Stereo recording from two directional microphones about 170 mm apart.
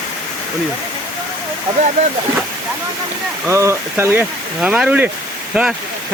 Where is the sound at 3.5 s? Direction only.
15° right (ahead or behind).